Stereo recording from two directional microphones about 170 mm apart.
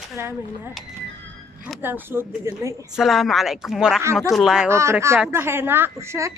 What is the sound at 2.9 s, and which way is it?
Speech, centre (ahead or behind).